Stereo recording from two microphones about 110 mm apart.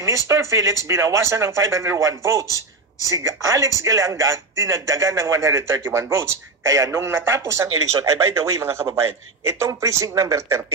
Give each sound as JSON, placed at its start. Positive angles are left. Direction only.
{"t": 0.3, "sound": "a man's voice", "side_deg": -25}